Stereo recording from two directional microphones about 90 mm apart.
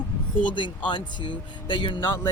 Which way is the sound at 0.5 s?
65° left (ahead or behind).